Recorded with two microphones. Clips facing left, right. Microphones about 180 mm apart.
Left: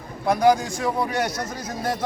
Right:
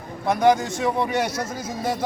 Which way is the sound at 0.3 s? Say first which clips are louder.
Even; centre (ahead or behind).